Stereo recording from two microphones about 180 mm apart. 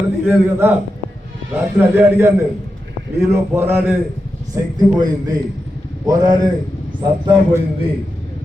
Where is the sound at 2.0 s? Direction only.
10° right (ahead or behind).